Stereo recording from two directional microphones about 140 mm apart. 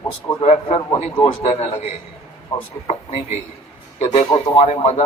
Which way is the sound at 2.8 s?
50° left (ahead or behind).